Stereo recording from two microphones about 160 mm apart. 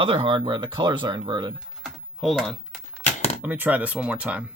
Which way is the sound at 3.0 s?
50° left (ahead or behind).